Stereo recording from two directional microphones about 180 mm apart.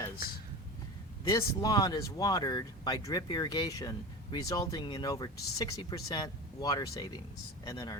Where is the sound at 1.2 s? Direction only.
20° left (ahead or behind).